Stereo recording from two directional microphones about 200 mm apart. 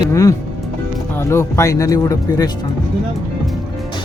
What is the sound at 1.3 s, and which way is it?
Speech, 15° left (ahead or behind).